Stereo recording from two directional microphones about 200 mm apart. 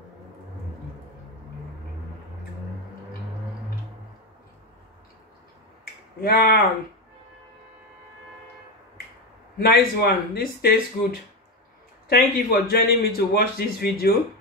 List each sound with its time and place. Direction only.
6.2 s a man's voice: 50° left (ahead or behind)
9.6 s a man's voice: 50° left (ahead or behind)